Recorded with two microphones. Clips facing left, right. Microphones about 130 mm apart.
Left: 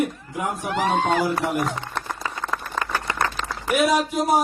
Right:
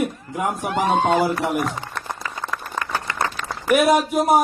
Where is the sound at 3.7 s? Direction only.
60° right (ahead or behind).